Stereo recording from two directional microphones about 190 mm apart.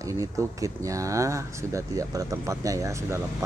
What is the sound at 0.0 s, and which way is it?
Speech, 15° right (ahead or behind).